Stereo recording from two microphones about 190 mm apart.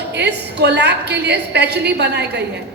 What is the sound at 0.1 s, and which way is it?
A woman's voice, 65° right (ahead or behind).